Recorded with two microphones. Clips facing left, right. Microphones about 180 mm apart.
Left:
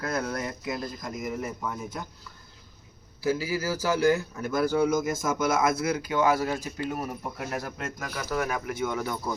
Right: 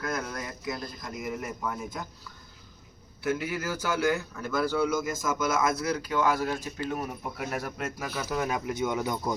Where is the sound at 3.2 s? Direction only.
35° left (ahead or behind).